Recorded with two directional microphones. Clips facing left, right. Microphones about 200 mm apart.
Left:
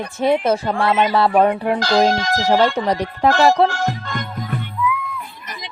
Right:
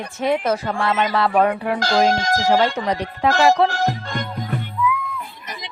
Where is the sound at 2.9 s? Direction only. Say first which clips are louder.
Left 3 dB; 40° left (ahead or behind).